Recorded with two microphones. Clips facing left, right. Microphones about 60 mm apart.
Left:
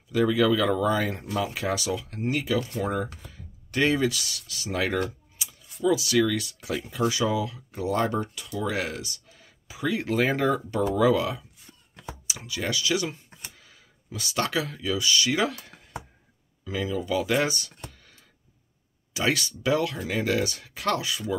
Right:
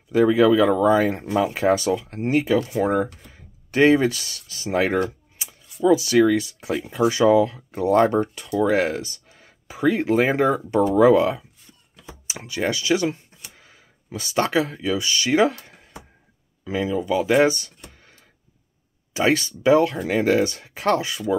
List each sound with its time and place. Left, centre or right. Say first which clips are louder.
0.1 s speech: right 6 dB; right
10.0 s speech: right 2 dB; right
16.9 s speech: right 6 dB; right
19.1 s speech: right 6 dB; right